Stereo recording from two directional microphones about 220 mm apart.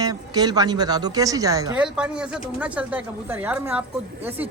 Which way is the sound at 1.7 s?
5° right (ahead or behind).